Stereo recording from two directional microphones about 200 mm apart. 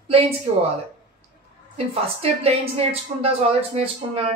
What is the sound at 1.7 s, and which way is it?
A woman's voice, 30° right (ahead or behind).